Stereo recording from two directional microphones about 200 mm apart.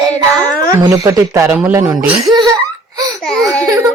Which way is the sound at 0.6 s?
20° right (ahead or behind).